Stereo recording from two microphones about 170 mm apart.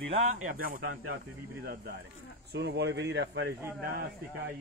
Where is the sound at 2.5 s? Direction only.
80° right.